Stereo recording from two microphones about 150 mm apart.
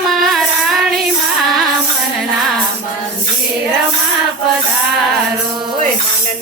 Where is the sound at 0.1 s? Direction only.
Centre (ahead or behind).